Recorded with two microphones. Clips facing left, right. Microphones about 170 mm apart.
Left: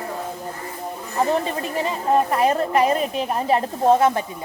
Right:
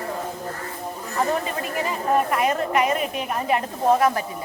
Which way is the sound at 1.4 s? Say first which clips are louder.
Left 2 dB; 30° left (ahead or behind).